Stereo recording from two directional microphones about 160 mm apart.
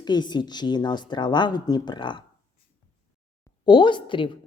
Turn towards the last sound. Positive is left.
turn(degrees=30)  # may be behind; listen again after turning